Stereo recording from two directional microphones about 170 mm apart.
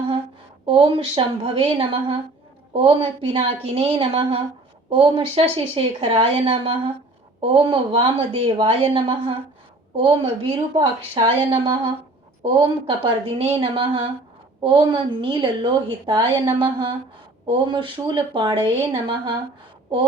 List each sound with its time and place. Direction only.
0.6 s a woman's voice: 35° right (ahead or behind)